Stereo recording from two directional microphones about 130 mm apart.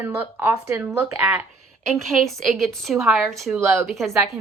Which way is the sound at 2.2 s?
Centre (ahead or behind).